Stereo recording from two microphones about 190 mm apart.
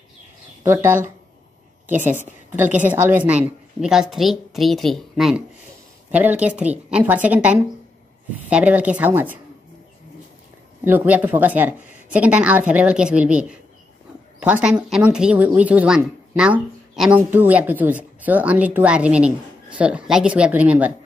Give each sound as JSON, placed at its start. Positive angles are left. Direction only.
{"t": 0.7, "sound": "a woman's voice", "side_deg": -10}
{"t": 2.0, "sound": "a woman's voice", "side_deg": -40}
{"t": 2.2, "sound": "a woman's voice", "side_deg": -10}
{"t": 10.8, "sound": "a woman's voice", "side_deg": -10}